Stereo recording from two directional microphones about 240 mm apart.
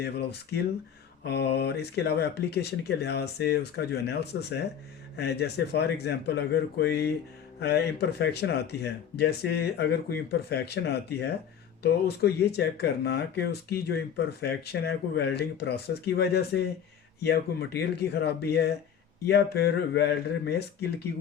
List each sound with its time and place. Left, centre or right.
0.0 s speech: left